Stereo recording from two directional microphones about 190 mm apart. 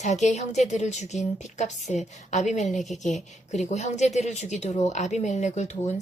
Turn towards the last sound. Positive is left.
turn(degrees=35)  # may be behind; listen again after turning